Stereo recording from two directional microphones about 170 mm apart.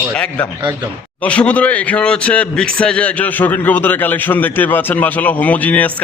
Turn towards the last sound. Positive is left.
turn(degrees=10)  # may be behind; listen again after turning